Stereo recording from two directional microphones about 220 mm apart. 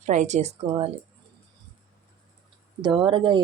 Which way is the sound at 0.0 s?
35° right (ahead or behind).